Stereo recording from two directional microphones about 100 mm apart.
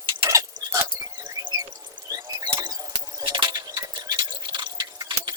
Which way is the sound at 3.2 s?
50° right (ahead or behind).